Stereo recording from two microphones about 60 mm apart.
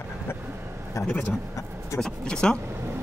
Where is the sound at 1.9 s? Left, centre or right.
Centre.